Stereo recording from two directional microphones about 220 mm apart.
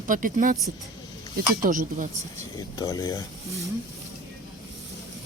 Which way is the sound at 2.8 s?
15° left (ahead or behind).